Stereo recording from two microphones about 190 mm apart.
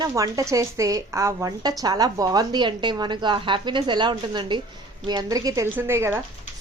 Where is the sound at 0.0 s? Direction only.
15° right (ahead or behind).